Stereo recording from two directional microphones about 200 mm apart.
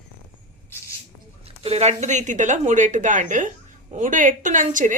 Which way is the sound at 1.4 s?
30° right (ahead or behind).